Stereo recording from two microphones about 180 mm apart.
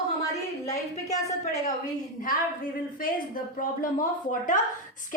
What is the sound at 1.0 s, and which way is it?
Speech, 20° left (ahead or behind).